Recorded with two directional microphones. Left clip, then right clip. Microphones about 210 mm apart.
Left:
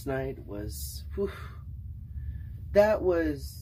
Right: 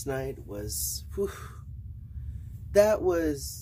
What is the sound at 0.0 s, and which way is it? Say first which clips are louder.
Speech: even; 10° right (ahead or behind).